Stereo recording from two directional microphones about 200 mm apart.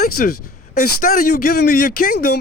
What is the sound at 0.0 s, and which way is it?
Speech, 50° left (ahead or behind).